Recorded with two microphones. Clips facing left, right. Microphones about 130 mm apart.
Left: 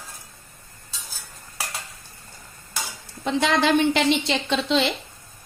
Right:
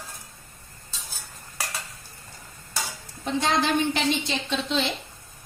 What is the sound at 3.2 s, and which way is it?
A woman's voice, 90° left.